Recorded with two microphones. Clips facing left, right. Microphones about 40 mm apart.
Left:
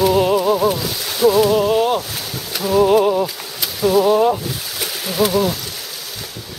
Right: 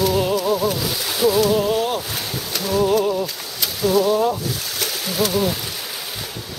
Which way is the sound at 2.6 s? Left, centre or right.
Centre.